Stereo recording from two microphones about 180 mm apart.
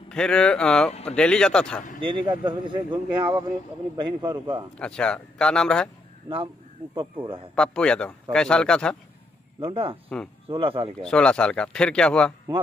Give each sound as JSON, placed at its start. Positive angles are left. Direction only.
{"t": 0.1, "sound": "speech", "side_deg": 5}
{"t": 2.0, "sound": "speech", "side_deg": -25}
{"t": 4.7, "sound": "speech", "side_deg": 5}
{"t": 6.2, "sound": "speech", "side_deg": -30}
{"t": 7.5, "sound": "speech", "side_deg": 5}
{"t": 9.6, "sound": "speech", "side_deg": -30}
{"t": 10.0, "sound": "speech", "side_deg": 5}
{"t": 10.5, "sound": "speech", "side_deg": -30}
{"t": 11.0, "sound": "speech", "side_deg": 5}